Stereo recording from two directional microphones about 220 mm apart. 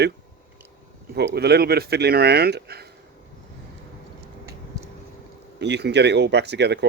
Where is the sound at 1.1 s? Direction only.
45° right (ahead or behind).